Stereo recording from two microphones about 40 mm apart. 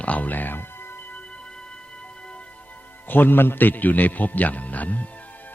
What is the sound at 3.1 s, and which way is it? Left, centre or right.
A man's voice, left.